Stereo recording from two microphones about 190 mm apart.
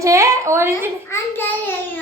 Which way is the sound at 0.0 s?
15° right (ahead or behind).